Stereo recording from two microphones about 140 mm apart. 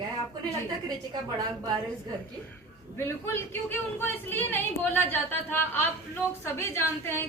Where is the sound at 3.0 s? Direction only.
20° left (ahead or behind).